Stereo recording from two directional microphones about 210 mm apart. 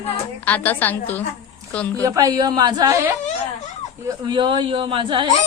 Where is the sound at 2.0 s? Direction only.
15° right (ahead or behind).